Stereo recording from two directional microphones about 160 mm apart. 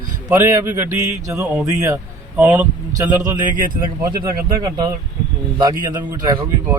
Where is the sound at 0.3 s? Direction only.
15° right (ahead or behind).